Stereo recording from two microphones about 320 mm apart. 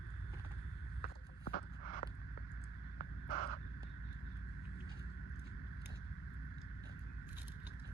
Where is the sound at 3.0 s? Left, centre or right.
Left.